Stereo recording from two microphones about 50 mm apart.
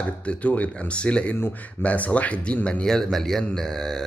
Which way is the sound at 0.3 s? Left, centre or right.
Left.